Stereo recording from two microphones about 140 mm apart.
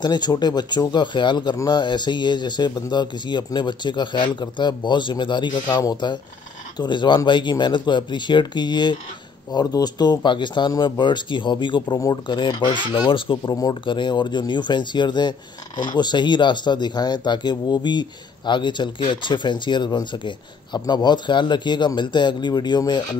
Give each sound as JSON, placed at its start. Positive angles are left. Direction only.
{"t": 0.0, "sound": "speech", "side_deg": 30}